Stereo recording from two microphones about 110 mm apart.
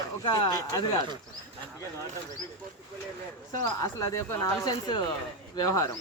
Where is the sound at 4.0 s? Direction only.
30° left (ahead or behind).